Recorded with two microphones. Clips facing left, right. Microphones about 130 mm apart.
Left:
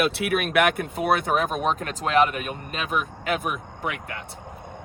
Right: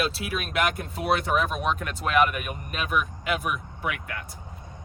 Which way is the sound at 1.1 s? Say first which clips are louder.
Left 1 dB; 50° left (ahead or behind).